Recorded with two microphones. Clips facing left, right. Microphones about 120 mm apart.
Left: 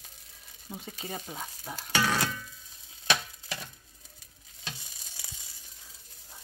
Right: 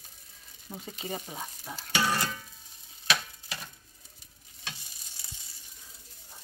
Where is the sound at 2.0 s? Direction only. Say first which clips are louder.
Even; 90° left.